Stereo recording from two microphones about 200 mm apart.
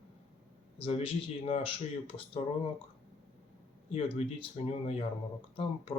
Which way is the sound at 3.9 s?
30° left (ahead or behind).